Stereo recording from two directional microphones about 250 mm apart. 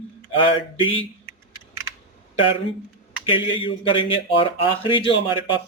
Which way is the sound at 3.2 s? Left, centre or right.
Left.